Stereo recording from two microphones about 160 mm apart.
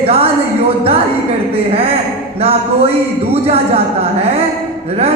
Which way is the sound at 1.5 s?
35° right (ahead or behind).